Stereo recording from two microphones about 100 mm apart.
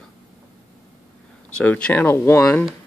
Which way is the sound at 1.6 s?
15° left (ahead or behind).